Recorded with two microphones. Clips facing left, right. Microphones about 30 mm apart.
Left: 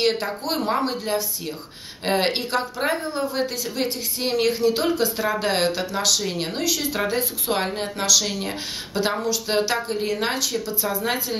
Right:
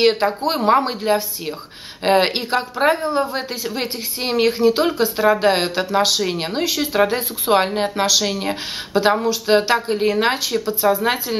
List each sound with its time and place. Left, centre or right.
0.0 s a woman's voice: right